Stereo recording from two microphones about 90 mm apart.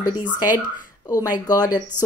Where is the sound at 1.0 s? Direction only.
40° left (ahead or behind).